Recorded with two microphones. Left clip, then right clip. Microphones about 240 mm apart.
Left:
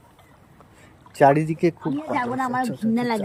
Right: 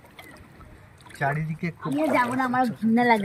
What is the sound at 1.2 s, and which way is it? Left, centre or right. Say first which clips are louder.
Speech: left 11 dB; left.